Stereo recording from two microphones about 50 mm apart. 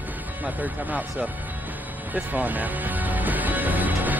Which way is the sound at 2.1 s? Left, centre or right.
Right.